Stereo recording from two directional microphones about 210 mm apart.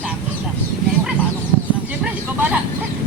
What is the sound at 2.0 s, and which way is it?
Vehicle, 5° right (ahead or behind).